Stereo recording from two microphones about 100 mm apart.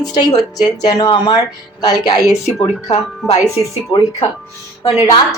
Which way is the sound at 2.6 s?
90° left.